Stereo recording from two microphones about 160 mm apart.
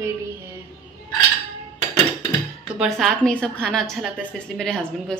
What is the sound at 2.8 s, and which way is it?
Speech, centre (ahead or behind).